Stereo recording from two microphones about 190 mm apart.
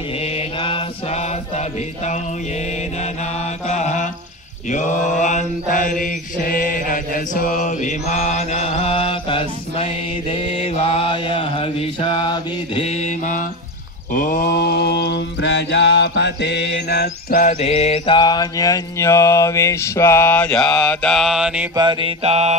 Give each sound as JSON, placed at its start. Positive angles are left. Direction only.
{"t": 0.2, "sound": "mantra", "side_deg": 30}
{"t": 3.6, "sound": "mantra", "side_deg": 40}
{"t": 17.6, "sound": "mantra", "side_deg": 35}
{"t": 21.7, "sound": "mantra", "side_deg": -25}